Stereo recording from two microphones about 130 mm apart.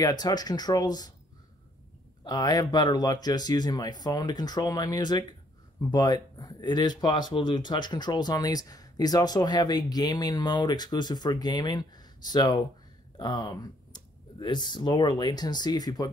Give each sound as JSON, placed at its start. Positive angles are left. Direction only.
{"t": 0.0, "sound": "speech", "side_deg": 30}
{"t": 2.2, "sound": "speech", "side_deg": 30}